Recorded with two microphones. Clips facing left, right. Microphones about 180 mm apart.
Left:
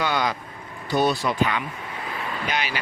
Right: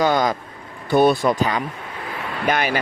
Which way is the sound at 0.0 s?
45° right (ahead or behind).